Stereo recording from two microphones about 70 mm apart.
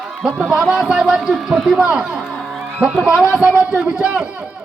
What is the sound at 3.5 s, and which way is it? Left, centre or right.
Speech, left.